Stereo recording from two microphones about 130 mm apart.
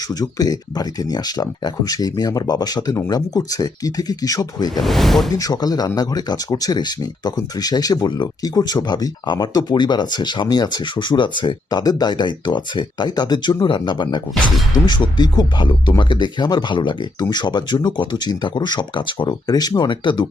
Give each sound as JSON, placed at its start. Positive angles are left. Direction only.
{"t": 0.1, "sound": "speech", "side_deg": 30}
{"t": 4.7, "sound": "speech", "side_deg": 0}
{"t": 5.3, "sound": "speech", "side_deg": 30}